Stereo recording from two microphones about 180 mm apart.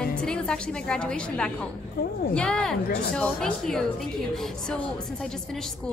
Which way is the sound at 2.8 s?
60° left (ahead or behind).